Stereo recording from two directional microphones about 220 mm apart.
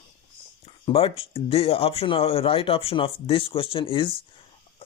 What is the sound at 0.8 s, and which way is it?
Speech, 25° left (ahead or behind).